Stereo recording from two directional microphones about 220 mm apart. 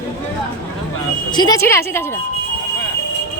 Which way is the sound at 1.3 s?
20° left (ahead or behind).